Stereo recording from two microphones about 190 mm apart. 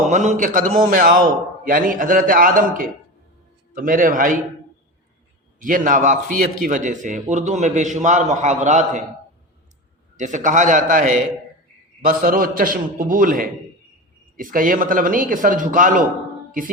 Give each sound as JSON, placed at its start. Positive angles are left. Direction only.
{"t": 0.0, "sound": "a man's voice", "side_deg": -40}
{"t": 5.5, "sound": "a man's voice", "side_deg": -45}
{"t": 10.2, "sound": "a man's voice", "side_deg": -40}